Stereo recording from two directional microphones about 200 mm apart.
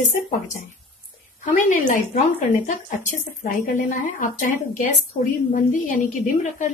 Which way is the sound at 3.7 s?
40° left (ahead or behind).